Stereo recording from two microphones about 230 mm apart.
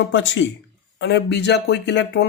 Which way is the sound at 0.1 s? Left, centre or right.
Left.